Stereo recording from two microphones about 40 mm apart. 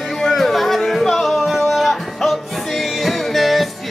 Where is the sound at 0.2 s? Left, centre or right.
Centre.